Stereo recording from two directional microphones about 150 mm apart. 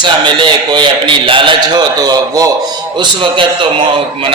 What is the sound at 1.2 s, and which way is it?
A man's voice, 35° right (ahead or behind).